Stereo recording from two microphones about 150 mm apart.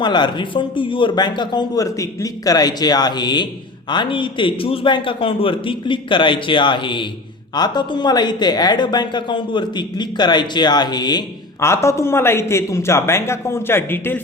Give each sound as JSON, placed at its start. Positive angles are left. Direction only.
{"t": 0.0, "sound": "a woman's voice", "side_deg": 30}